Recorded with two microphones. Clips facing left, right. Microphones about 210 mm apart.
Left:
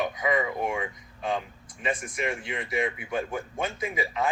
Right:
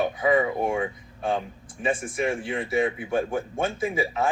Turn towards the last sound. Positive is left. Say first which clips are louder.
# right 3 dB
turn(degrees=-30)  # may be behind; listen again after turning